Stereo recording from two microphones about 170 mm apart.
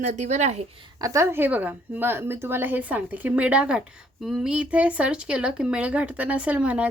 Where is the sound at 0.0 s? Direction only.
45° right (ahead or behind).